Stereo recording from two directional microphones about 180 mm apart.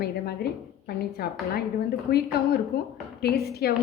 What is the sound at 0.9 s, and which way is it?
A woman's voice, 60° left (ahead or behind).